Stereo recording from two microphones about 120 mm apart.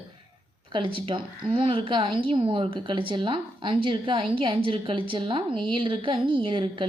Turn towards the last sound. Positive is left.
turn(degrees=-45)  # may be behind; listen again after turning